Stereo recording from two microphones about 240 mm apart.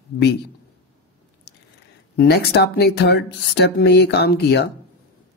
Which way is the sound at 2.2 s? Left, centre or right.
Left.